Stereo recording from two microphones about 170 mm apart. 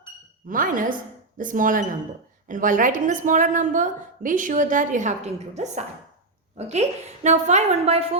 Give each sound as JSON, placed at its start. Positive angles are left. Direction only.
{"t": 0.4, "sound": "a woman's voice", "side_deg": -55}